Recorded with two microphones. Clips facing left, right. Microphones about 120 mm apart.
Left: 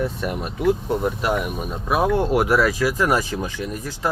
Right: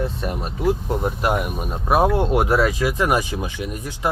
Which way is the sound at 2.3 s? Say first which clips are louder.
Even; 25° right (ahead or behind).